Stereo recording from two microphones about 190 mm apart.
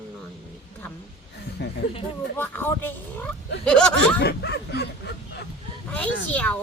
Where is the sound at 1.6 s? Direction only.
65° left (ahead or behind).